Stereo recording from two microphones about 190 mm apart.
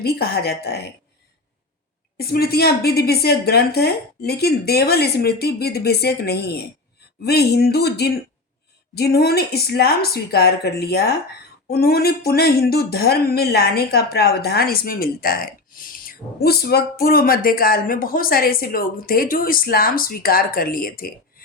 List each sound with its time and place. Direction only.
0.0 s a woman's voice: 55° left (ahead or behind)
2.1 s a woman's voice: 55° left (ahead or behind)